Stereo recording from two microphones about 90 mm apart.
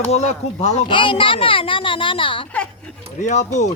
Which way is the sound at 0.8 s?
70° left (ahead or behind).